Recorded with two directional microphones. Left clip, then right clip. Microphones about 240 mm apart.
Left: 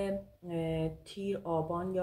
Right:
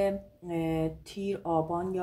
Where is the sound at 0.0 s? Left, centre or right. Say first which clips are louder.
Right 7 dB; right.